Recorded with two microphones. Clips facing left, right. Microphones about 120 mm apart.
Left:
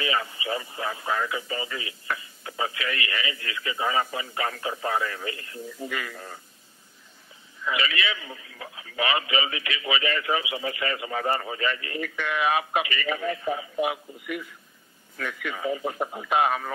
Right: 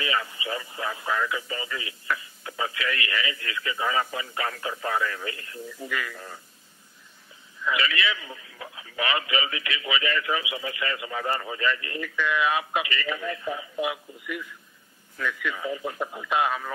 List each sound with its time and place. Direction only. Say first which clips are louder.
0.0 s a man's voice: left 1 dB; 30° left (ahead or behind)
7.6 s a man's voice: right 1 dB; 30° left (ahead or behind)
15.5 s a man's voice: left 2 dB; 30° left (ahead or behind)